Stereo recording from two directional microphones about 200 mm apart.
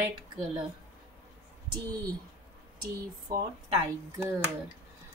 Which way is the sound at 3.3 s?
20° right (ahead or behind).